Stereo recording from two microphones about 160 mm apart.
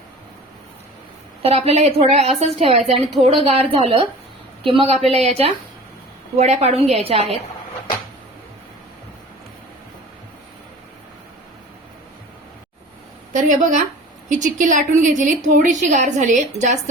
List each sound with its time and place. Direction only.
1.4 s a woman's voice: 40° right (ahead or behind)
13.3 s a woman's voice: 55° right (ahead or behind)